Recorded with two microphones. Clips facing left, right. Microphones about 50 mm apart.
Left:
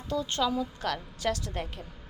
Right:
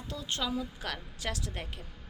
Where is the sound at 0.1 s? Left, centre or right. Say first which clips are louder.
Left 6 dB; centre.